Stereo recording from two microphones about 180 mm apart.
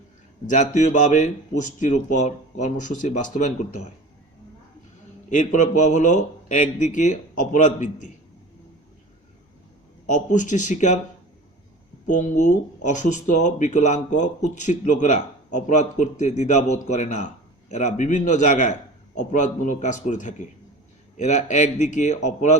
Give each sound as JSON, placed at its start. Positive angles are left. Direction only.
{"t": 0.4, "sound": "speech", "side_deg": 45}
{"t": 5.3, "sound": "speech", "side_deg": 45}
{"t": 10.1, "sound": "speech", "side_deg": 45}
{"t": 12.0, "sound": "a man's voice", "side_deg": 45}